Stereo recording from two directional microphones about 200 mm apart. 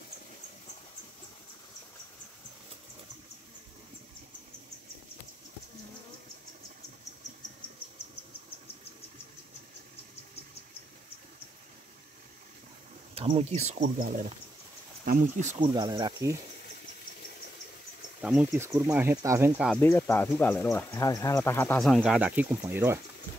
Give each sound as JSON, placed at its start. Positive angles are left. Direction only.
{"t": 13.1, "sound": "speech", "side_deg": -30}
{"t": 15.6, "sound": "speech", "side_deg": -20}
{"t": 18.2, "sound": "speech", "side_deg": -5}
{"t": 19.7, "sound": "speech", "side_deg": 10}